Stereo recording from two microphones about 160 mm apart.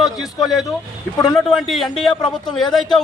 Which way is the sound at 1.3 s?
5° left (ahead or behind).